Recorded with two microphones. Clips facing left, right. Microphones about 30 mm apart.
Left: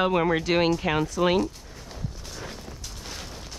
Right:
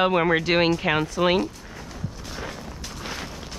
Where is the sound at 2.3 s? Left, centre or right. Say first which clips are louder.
Right 4 dB; right.